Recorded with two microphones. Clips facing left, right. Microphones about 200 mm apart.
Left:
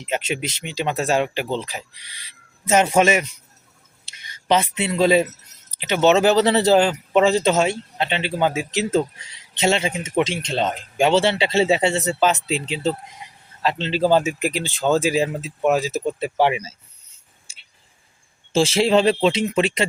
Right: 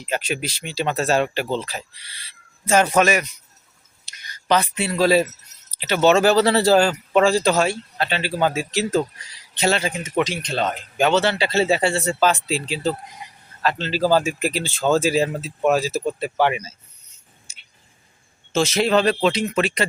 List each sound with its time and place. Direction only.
0.0 s speech: 25° left (ahead or behind)
17.5 s a sound: 30° left (ahead or behind)
18.5 s speech: 30° left (ahead or behind)